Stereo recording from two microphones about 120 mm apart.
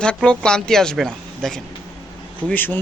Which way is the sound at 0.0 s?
5° left (ahead or behind).